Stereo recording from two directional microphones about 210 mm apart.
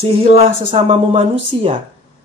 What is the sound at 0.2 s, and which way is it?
Speech, 30° right (ahead or behind).